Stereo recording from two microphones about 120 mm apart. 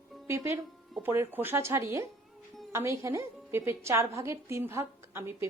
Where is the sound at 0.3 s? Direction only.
25° right (ahead or behind).